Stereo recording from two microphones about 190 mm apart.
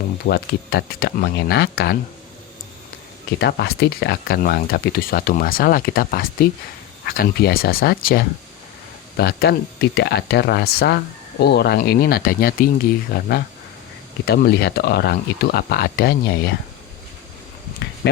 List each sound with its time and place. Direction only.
0.3 s speech: 60° left (ahead or behind)
3.3 s speech: 60° left (ahead or behind)
18.0 s speech: 60° left (ahead or behind)